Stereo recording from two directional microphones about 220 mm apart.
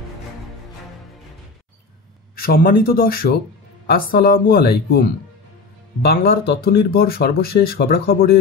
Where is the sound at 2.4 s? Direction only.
40° left (ahead or behind).